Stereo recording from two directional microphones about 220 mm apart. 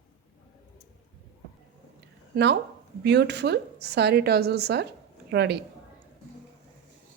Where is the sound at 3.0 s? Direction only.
50° right (ahead or behind).